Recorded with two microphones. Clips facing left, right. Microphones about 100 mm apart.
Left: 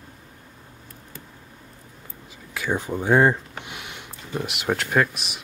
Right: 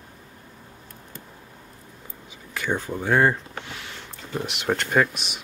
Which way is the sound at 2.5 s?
5° left (ahead or behind).